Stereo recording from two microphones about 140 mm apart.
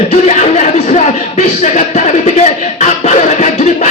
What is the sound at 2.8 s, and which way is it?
Music, 55° left (ahead or behind).